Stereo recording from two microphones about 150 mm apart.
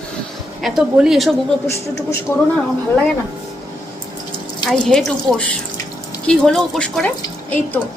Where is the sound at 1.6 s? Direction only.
20° left (ahead or behind).